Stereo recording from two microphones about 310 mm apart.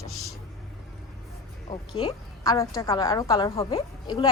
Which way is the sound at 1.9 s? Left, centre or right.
Centre.